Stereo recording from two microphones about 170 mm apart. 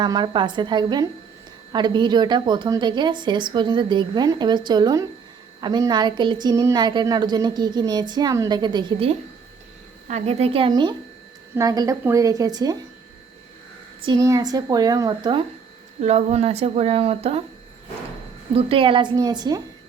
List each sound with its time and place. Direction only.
0.0 s a woman's voice: 25° right (ahead or behind)
14.0 s a woman's voice: 25° right (ahead or behind)
16.0 s speech: 40° right (ahead or behind)
18.5 s a woman's voice: 30° right (ahead or behind)